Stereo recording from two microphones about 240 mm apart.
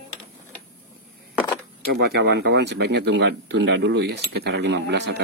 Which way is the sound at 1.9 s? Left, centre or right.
Right.